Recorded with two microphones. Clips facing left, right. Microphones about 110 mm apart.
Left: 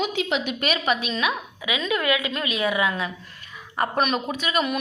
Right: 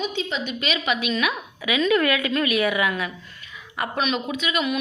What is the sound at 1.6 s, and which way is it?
A woman's voice, 20° left (ahead or behind).